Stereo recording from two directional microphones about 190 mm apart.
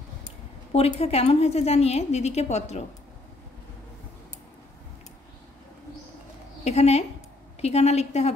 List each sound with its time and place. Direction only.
0.7 s a woman's voice: 30° left (ahead or behind)
6.6 s a woman's voice: 35° left (ahead or behind)